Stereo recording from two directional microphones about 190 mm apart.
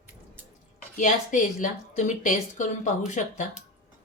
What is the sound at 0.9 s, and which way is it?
A woman's voice, 40° left (ahead or behind).